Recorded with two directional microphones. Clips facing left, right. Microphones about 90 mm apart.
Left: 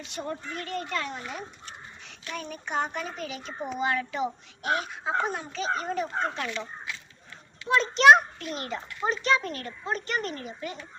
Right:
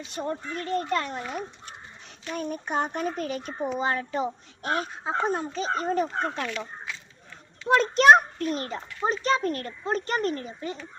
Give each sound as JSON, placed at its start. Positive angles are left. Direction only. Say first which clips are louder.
{"t": 0.1, "sound": "speech", "louder": "right 3 dB", "side_deg": -40}
{"t": 3.8, "sound": "a child's voice", "louder": "left 1 dB", "side_deg": -35}
{"t": 7.7, "sound": "a child's voice", "louder": "right 1 dB", "side_deg": -45}